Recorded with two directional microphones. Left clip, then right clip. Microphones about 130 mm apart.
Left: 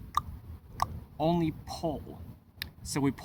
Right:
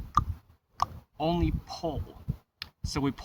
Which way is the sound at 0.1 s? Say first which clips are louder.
Right 4 dB; 45° left (ahead or behind).